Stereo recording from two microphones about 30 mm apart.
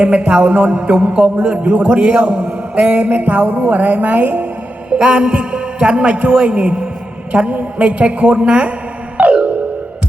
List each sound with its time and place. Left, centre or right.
0.2 s a man's voice: right
2.7 s a woman's voice: right
4.9 s a man's voice: right
9.1 s music: right